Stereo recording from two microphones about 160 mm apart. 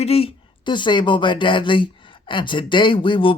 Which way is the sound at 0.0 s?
40° left (ahead or behind).